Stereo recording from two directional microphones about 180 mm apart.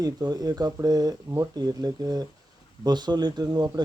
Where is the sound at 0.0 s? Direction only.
20° right (ahead or behind).